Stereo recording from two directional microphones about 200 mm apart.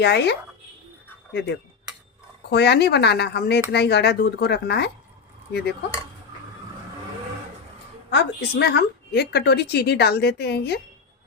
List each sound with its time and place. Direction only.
0.0 s a woman's voice: 55° left (ahead or behind)
8.1 s a woman's voice: 60° left (ahead or behind)